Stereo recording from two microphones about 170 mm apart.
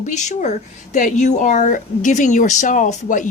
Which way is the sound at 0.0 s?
45° left (ahead or behind).